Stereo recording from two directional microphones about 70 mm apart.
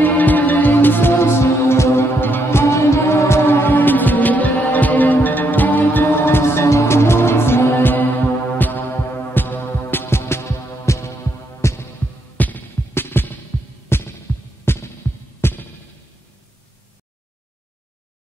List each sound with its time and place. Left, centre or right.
0.0 s music: left
2.6 s music: left
9.3 s hum: left
11.6 s throbbing: left
12.4 s music: left
13.9 s music: left